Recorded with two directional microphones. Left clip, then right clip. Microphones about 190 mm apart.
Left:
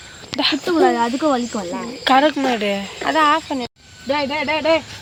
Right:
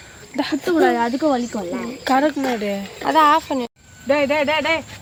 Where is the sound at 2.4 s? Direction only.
15° left (ahead or behind).